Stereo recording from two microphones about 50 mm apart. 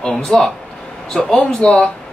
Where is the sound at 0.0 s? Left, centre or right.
Centre.